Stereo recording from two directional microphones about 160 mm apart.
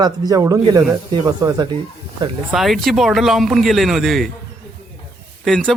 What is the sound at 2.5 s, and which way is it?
Speech, centre (ahead or behind).